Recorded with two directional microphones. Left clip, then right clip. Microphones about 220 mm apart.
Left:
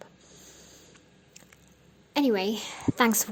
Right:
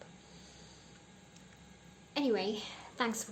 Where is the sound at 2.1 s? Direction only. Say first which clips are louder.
Left 7 dB; 45° left (ahead or behind).